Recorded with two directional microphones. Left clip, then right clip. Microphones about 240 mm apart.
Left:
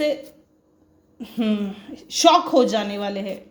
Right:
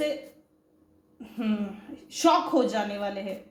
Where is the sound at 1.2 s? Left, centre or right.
Left.